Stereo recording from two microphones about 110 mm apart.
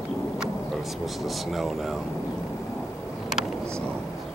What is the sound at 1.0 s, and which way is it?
Speech, centre (ahead or behind).